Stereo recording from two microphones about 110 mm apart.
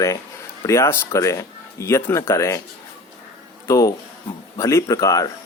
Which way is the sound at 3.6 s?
30° left (ahead or behind).